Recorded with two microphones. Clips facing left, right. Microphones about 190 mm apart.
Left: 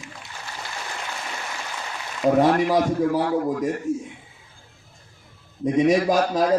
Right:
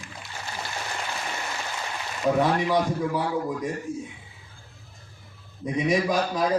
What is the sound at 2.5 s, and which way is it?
A man's voice, 50° left (ahead or behind).